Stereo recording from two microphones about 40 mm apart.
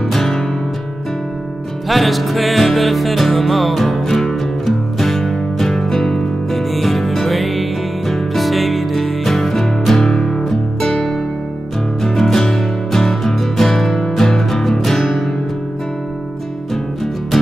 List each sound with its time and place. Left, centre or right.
0.1 s music: centre
1.9 s music: centre
6.7 s music: centre
10.9 s music: centre
16.7 s music: centre